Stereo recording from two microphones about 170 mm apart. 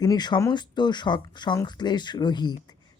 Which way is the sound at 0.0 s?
25° left (ahead or behind).